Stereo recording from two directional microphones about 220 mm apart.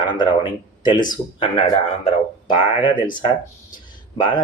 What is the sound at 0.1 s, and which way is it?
Speech, 20° left (ahead or behind).